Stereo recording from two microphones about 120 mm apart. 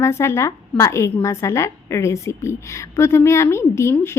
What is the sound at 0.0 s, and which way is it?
A woman's voice, 20° left (ahead or behind).